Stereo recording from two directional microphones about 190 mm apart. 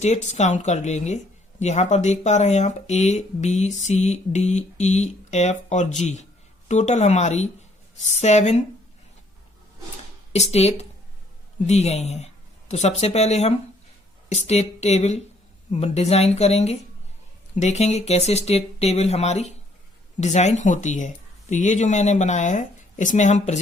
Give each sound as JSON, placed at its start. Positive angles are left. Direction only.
{"t": 0.0, "sound": "speech", "side_deg": 35}
{"t": 10.3, "sound": "speech", "side_deg": 35}